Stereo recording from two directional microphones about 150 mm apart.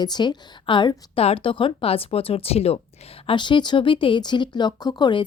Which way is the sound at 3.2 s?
30° left (ahead or behind).